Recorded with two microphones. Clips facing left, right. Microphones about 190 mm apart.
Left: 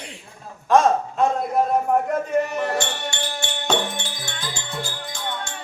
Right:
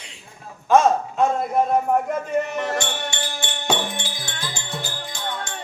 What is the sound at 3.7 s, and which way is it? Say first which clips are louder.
Speech: left 1 dB; 15° right (ahead or behind).